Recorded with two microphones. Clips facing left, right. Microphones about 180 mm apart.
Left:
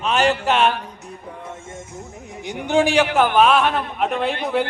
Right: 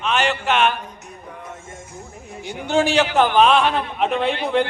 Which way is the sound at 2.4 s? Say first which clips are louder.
Left 1 dB; 15° left (ahead or behind).